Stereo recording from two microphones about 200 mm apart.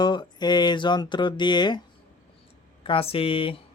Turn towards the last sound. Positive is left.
turn(degrees=25)  # may be behind; listen again after turning